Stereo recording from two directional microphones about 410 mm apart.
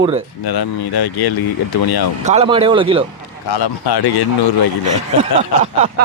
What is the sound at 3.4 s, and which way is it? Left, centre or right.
A man's voice, left.